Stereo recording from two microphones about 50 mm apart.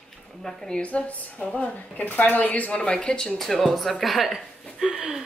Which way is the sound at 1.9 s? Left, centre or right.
Left.